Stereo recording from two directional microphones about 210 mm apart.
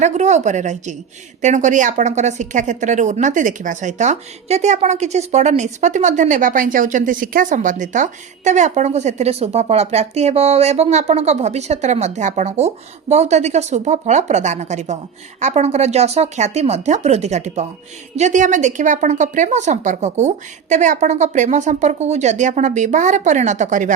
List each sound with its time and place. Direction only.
0.0 s speech: 35° right (ahead or behind)